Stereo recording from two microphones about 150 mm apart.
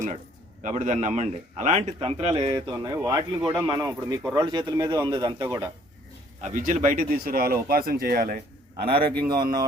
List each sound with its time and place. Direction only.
0.6 s a man's voice: 55° right (ahead or behind)
2.5 s speech: 25° right (ahead or behind)
4.4 s speech: 30° right (ahead or behind)
6.5 s speech: 55° right (ahead or behind); by 8.4 s 80° right
8.8 s a man's voice: 90° right
9.2 s speech: 30° right (ahead or behind)